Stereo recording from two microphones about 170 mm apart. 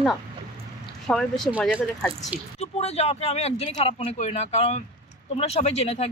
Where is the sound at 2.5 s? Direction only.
40° left (ahead or behind).